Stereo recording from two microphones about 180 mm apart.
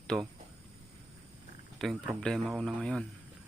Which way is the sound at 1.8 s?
Centre (ahead or behind).